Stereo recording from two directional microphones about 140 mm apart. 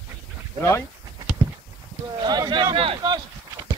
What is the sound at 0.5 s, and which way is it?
Speech, 20° left (ahead or behind).